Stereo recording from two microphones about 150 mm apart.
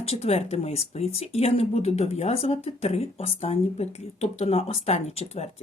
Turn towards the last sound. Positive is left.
turn(degrees=45)  # may be behind; listen again after turning